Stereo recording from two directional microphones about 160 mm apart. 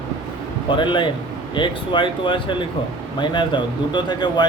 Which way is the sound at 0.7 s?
30° left (ahead or behind).